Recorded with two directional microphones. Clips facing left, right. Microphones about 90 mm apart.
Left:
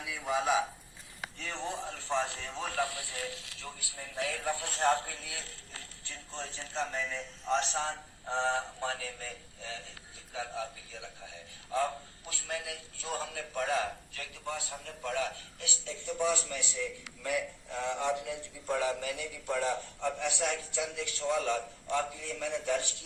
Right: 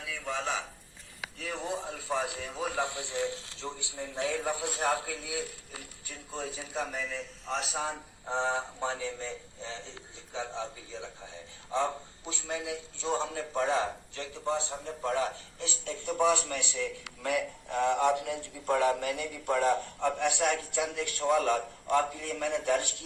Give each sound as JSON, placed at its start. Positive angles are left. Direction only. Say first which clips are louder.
{"t": 0.0, "sound": "a sound", "louder": "left 3 dB", "side_deg": 15}
{"t": 1.2, "sound": "a man's voice", "louder": "right 1 dB", "side_deg": -10}
{"t": 2.7, "sound": "a man's voice", "louder": "right 1 dB", "side_deg": -20}
{"t": 15.8, "sound": "a man's voice", "louder": "right 5 dB", "side_deg": -55}